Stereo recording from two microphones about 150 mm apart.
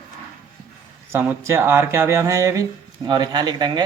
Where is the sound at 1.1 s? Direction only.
15° right (ahead or behind).